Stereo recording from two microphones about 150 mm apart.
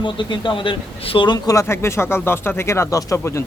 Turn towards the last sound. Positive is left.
turn(degrees=20)  # may be behind; listen again after turning